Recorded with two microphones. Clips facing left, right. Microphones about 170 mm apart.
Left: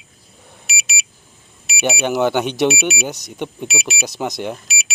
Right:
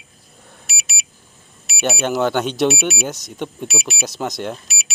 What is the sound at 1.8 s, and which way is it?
Speech, 15° left (ahead or behind).